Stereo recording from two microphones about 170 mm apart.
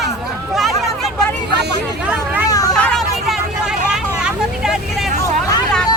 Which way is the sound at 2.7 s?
5° left (ahead or behind).